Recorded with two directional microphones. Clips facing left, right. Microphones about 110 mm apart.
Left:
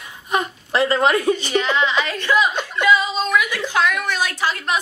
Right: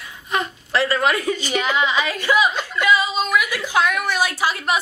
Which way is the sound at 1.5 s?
10° right (ahead or behind).